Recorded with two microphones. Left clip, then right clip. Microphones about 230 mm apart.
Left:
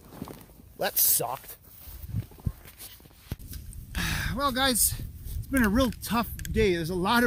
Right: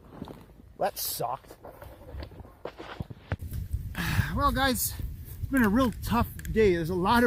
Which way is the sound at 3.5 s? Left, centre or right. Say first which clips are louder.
Even; centre.